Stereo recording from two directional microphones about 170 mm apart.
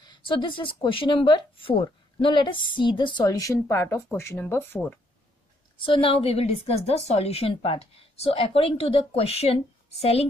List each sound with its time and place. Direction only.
0.0 s speech: 30° left (ahead or behind); by 4.9 s 10° left (ahead or behind)
5.8 s a woman's voice: 30° left (ahead or behind)